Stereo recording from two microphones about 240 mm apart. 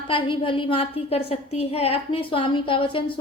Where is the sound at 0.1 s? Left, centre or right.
Left.